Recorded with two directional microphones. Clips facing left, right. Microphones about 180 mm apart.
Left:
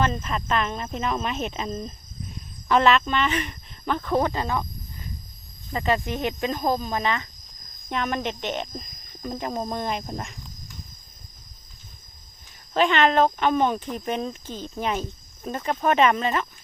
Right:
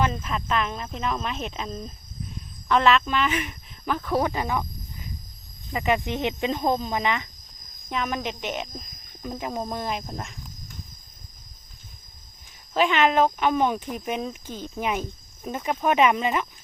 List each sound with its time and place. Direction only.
0.2 s speech: centre (ahead or behind)
5.7 s speech: 15° right (ahead or behind)
7.9 s speech: centre (ahead or behind)
12.7 s speech: 5° right (ahead or behind)